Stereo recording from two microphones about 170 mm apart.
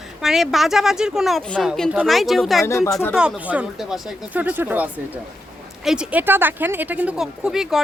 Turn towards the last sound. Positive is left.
turn(degrees=-5)  # may be behind; listen again after turning